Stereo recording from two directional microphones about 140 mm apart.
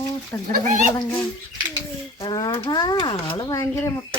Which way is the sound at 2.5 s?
35° left (ahead or behind).